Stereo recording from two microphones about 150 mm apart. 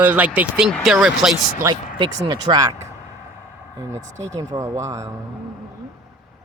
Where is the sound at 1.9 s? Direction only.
30° right (ahead or behind).